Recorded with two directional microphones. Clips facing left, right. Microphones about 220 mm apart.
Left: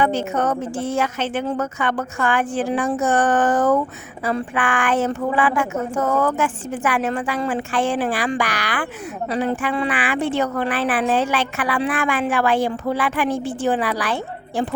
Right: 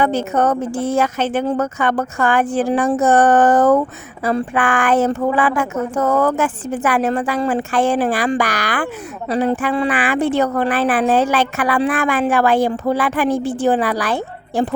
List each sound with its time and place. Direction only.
0.0 s a woman's voice: 40° right (ahead or behind)